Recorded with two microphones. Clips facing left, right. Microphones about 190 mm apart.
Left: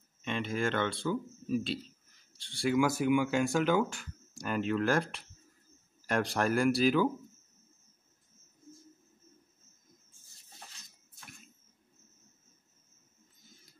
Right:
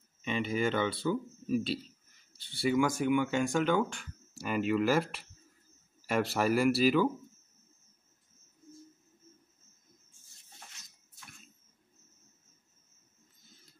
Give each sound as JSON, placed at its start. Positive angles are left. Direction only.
{"t": 0.2, "sound": "speech", "side_deg": -5}